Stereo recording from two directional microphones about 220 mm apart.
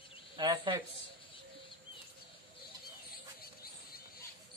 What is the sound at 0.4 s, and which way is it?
Speech, 20° right (ahead or behind).